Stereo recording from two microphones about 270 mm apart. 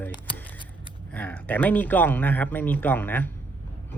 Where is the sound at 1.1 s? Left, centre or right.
Centre.